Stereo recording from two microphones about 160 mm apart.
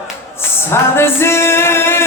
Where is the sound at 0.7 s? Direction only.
15° left (ahead or behind).